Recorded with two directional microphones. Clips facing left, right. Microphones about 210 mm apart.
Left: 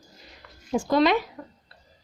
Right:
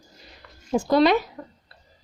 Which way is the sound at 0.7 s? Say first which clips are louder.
Right 3 dB; 40° right (ahead or behind).